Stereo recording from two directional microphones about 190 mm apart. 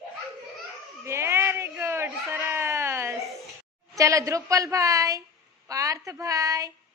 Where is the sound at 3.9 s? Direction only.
15° right (ahead or behind).